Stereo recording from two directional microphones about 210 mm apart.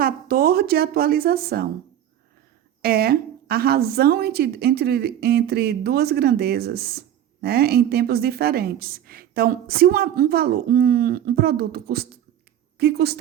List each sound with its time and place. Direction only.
0.0 s a woman's voice: 45° right (ahead or behind)
2.8 s a woman's voice: 45° right (ahead or behind)